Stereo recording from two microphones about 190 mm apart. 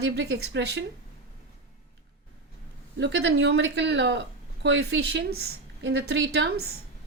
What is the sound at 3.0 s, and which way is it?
Speech, 65° right (ahead or behind).